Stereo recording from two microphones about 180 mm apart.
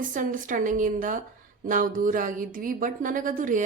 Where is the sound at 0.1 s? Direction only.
45° right (ahead or behind).